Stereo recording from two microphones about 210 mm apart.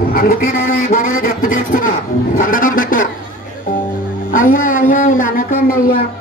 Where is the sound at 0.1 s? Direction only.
40° left (ahead or behind).